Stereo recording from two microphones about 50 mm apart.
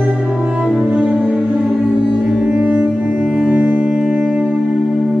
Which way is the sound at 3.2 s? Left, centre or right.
Right.